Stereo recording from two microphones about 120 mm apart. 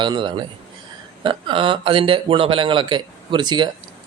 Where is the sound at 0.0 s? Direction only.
40° right (ahead or behind).